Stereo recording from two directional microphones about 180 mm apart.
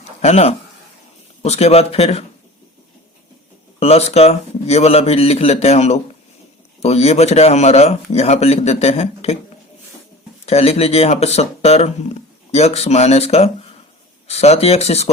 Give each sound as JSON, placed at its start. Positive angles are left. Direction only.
{"t": 0.2, "sound": "speech", "side_deg": 35}
{"t": 3.8, "sound": "speech", "side_deg": 35}
{"t": 10.4, "sound": "speech", "side_deg": 35}